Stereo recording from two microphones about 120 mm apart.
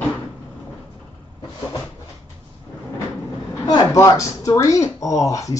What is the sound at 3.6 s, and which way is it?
Speech, 30° left (ahead or behind).